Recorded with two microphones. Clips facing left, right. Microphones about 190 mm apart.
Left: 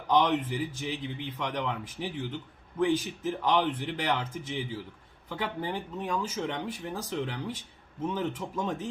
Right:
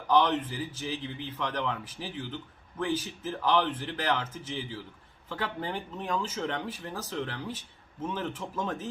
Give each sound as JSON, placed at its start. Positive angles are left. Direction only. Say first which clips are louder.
{"t": 0.1, "sound": "speech", "louder": "even", "side_deg": 15}